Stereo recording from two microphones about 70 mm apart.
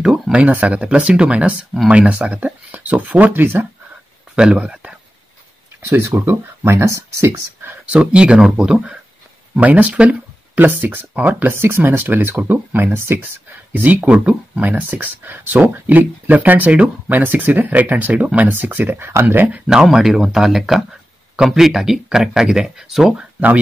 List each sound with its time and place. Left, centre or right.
0.5 s speech: centre
4.4 s speech: centre
5.9 s speech: right
7.8 s speech: centre
11.5 s speech: right
14.0 s speech: centre
19.6 s speech: centre
23.1 s speech: right